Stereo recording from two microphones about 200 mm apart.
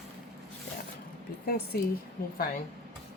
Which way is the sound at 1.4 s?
50° left (ahead or behind).